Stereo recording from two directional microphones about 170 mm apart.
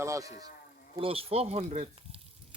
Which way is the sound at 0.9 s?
35° right (ahead or behind).